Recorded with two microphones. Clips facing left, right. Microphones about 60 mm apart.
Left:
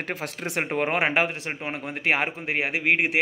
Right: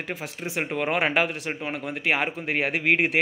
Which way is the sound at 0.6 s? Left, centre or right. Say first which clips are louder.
Left 1 dB; left.